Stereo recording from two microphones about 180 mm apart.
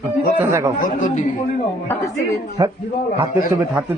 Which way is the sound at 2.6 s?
20° right (ahead or behind).